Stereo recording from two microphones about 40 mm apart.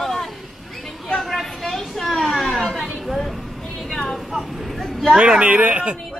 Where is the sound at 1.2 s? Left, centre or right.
Centre.